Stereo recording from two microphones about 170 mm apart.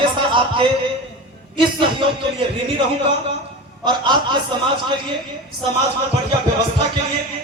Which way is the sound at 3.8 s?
25° right (ahead or behind).